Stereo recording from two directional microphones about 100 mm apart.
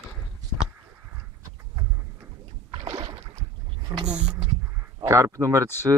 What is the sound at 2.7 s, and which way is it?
Rowboat, 75° right (ahead or behind).